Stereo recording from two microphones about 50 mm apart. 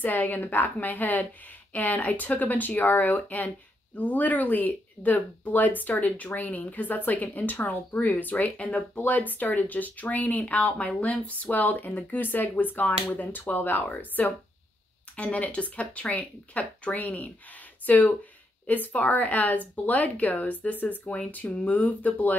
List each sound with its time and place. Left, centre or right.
0.0 s speech: left
14.2 s speech: left